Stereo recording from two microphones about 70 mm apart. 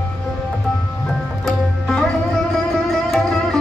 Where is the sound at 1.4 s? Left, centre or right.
Centre.